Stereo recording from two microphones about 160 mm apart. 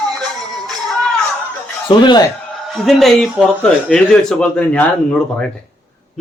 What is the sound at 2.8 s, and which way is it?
Speech, centre (ahead or behind).